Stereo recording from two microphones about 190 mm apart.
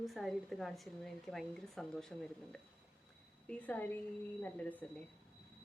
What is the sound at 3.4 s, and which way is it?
Speech, 10° left (ahead or behind).